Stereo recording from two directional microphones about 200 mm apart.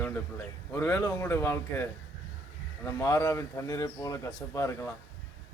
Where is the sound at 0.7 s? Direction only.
15° left (ahead or behind).